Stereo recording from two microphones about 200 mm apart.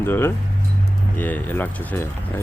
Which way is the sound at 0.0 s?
10° left (ahead or behind).